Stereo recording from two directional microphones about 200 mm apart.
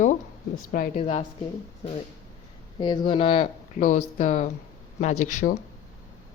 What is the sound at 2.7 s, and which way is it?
Speech, 25° left (ahead or behind).